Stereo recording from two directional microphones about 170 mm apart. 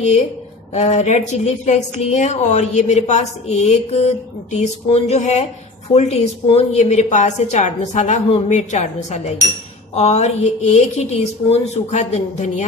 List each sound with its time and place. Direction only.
0.7 s a woman's voice: 40° left (ahead or behind)